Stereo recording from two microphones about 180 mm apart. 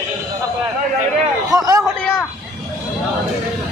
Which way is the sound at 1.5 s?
20° right (ahead or behind).